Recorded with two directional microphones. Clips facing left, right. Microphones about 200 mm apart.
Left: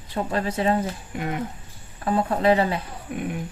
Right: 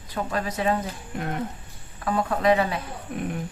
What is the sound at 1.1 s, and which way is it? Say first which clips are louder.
Speech: even; 5° left (ahead or behind).